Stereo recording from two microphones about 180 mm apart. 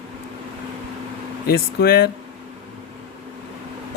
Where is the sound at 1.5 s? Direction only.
60° left (ahead or behind).